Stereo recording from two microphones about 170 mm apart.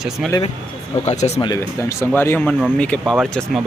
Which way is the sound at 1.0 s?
45° left (ahead or behind).